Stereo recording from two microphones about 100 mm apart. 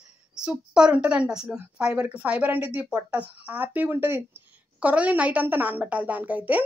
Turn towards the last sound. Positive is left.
turn(degrees=-15)  # may be behind; listen again after turning